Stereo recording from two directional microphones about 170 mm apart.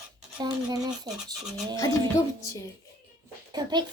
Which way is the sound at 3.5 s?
25° right (ahead or behind).